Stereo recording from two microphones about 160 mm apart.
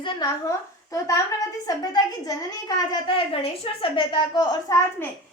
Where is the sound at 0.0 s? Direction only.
30° left (ahead or behind).